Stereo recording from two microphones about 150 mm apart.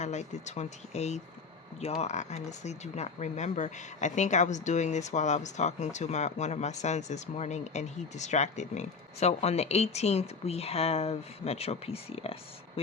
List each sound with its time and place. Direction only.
0.0 s speech: 50° left (ahead or behind)